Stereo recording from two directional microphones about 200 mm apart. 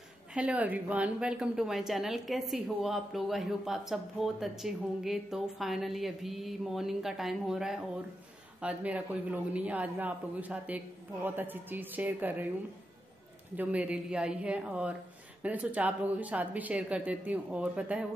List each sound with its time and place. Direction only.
0.3 s a woman's voice: 5° right (ahead or behind)
13.6 s a woman's voice: 5° right (ahead or behind)